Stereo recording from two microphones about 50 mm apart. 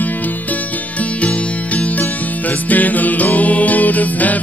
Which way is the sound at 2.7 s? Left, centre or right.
Left.